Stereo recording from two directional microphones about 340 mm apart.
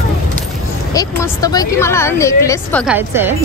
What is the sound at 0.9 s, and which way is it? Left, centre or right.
A woman's voice, centre.